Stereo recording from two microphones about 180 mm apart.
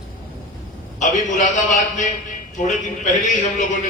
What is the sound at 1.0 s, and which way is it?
Speech, 40° left (ahead or behind).